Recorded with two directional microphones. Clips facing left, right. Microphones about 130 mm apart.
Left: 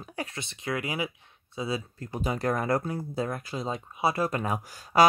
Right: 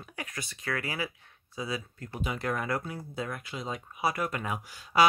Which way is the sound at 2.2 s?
40° left (ahead or behind).